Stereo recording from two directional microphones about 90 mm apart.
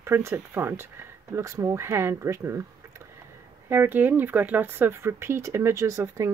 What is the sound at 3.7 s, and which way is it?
Speech, 25° right (ahead or behind).